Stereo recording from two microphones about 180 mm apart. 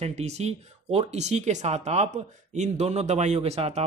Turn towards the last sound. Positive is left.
turn(degrees=-35)  # may be behind; listen again after turning